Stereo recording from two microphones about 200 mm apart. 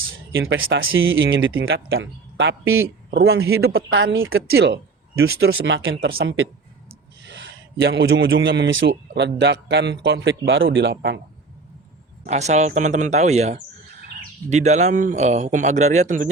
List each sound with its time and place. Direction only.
0.3 s speech: 80° right
4.5 s speech: 55° right (ahead or behind); by 7.3 s 75° right (ahead or behind)
7.8 s a man's voice: 60° right (ahead or behind)
12.2 s speech: 35° right (ahead or behind)